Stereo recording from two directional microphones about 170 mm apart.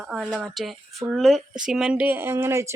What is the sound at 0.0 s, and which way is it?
A woman's voice, centre (ahead or behind).